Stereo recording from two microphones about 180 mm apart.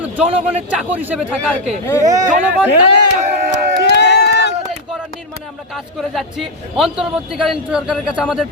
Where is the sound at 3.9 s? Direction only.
70° left (ahead or behind).